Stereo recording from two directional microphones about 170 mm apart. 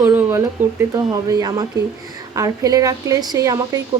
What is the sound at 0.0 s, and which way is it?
A woman's voice, 15° right (ahead or behind).